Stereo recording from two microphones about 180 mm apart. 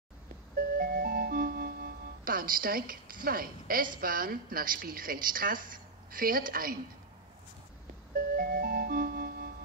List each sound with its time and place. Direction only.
0.7 s speech: 55° right (ahead or behind)
8.4 s music: 55° right (ahead or behind)